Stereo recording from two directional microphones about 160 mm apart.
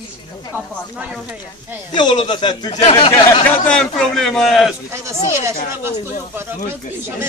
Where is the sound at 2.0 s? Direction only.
30° left (ahead or behind).